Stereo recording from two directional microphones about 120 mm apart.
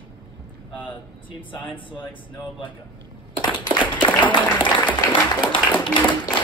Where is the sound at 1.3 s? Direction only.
45° left (ahead or behind).